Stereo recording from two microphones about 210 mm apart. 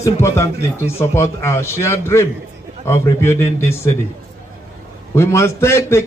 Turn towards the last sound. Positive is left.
turn(degrees=10)  # may be behind; listen again after turning